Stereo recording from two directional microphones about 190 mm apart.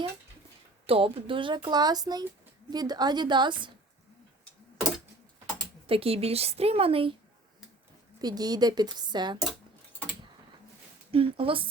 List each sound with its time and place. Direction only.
0.9 s speech: 30° right (ahead or behind)
5.9 s a woman's voice: 30° right (ahead or behind)
8.2 s speech: 20° right (ahead or behind)
11.1 s speech: 30° right (ahead or behind)